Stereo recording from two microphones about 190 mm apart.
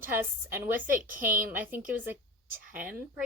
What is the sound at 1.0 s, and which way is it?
Speech, 45° right (ahead or behind).